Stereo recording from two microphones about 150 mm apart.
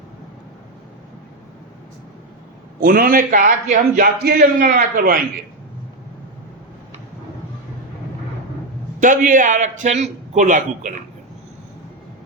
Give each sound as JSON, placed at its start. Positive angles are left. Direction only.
{"t": 2.8, "sound": "a man's voice", "side_deg": -75}
{"t": 9.0, "sound": "a man's voice", "side_deg": -60}